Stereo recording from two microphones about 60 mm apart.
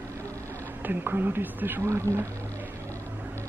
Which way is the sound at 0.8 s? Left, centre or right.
Right.